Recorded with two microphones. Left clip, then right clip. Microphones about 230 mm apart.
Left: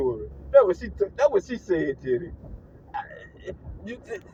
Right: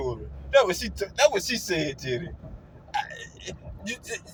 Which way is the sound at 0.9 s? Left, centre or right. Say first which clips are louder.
Even; right.